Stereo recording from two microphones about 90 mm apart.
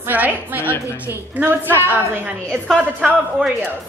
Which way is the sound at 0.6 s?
30° left (ahead or behind).